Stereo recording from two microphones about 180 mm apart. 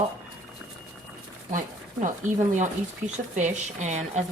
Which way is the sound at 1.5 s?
45° right (ahead or behind).